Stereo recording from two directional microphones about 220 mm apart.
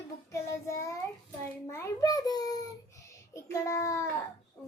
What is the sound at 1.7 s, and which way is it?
Speech, 15° left (ahead or behind).